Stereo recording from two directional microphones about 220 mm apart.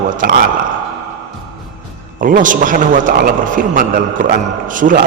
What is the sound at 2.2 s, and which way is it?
A man's voice, 35° right (ahead or behind).